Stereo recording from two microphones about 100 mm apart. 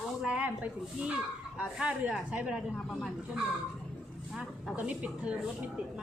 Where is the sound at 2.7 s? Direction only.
10° left (ahead or behind).